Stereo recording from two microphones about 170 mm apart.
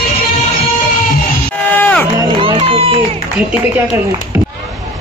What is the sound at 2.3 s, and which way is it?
Run, 30° right (ahead or behind).